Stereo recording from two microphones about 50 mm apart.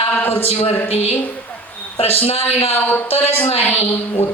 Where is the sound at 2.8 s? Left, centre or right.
Left.